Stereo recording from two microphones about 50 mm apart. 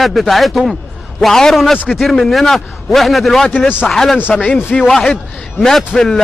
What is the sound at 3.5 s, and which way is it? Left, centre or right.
Speech, left.